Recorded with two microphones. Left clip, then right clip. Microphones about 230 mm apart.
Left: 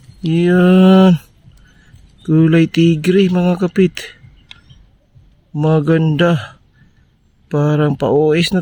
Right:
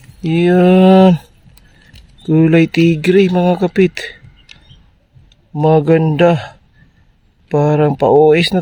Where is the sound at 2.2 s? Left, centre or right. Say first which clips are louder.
Right 2 dB; centre.